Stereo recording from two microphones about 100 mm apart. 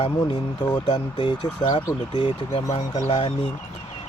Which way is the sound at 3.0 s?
90° left.